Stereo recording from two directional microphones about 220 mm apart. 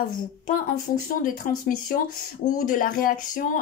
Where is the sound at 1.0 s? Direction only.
40° left (ahead or behind).